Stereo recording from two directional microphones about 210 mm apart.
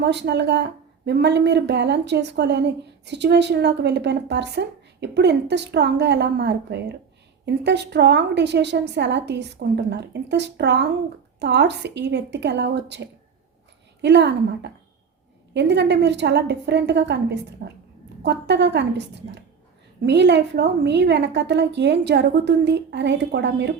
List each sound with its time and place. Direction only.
0.0 s a woman's voice: 55° right (ahead or behind)